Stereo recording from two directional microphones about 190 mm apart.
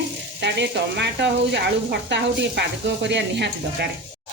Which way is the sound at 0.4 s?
65° right (ahead or behind).